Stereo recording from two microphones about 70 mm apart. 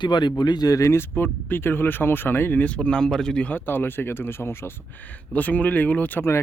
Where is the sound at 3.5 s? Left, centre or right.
Left.